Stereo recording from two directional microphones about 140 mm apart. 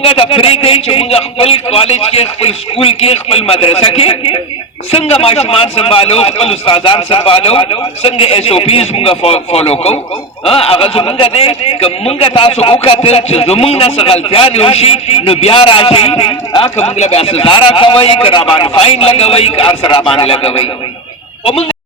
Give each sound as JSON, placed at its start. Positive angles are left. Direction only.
{"t": 0.0, "sound": "a man's voice", "side_deg": 40}